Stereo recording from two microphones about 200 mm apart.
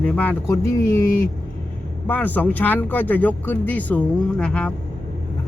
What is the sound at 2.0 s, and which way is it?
Speech, 10° left (ahead or behind).